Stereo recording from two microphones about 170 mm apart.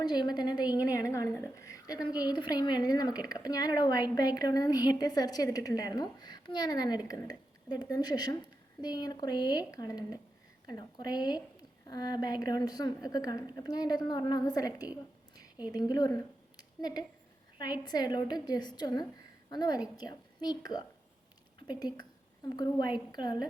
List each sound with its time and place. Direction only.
0.0 s a woman's voice: 25° left (ahead or behind)
16.6 s a sound: 25° left (ahead or behind)
17.6 s a woman's voice: 25° left (ahead or behind)
22.4 s a woman's voice: 25° left (ahead or behind)